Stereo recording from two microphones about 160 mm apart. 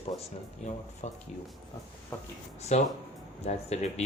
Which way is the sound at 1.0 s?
50° left (ahead or behind).